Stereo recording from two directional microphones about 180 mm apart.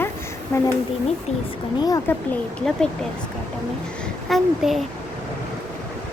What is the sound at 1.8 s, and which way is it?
Speech, 20° left (ahead or behind).